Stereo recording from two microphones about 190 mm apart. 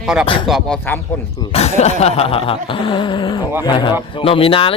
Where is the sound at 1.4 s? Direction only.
35° left (ahead or behind).